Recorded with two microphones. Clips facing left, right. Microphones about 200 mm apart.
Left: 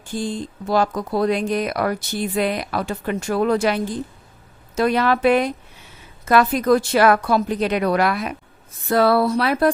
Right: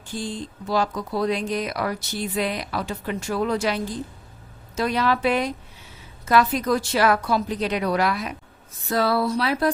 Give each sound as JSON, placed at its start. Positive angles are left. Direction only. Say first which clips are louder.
{"t": 0.1, "sound": "a woman's voice", "louder": "left 5 dB", "side_deg": 50}